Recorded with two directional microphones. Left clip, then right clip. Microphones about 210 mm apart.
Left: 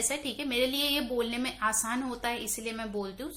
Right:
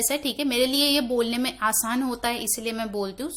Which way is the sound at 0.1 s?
45° right (ahead or behind).